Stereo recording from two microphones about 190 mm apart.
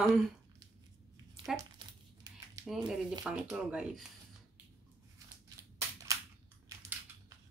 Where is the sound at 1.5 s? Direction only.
20° right (ahead or behind).